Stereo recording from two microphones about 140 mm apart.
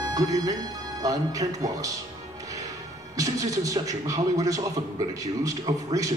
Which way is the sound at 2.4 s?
25° right (ahead or behind).